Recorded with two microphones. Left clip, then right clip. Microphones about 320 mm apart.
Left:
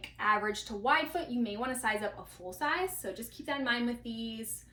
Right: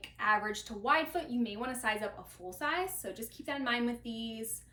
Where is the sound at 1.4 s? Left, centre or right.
Centre.